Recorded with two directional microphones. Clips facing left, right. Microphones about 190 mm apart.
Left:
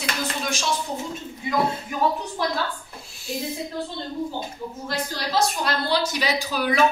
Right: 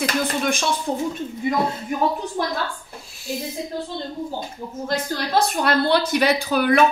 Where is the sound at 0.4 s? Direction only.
55° right (ahead or behind).